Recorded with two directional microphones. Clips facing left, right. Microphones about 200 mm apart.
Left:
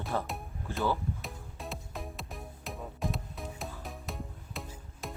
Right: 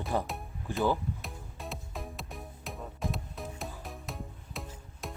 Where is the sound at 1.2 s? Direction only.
Centre (ahead or behind).